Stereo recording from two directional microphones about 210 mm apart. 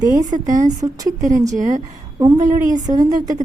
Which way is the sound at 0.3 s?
35° right (ahead or behind).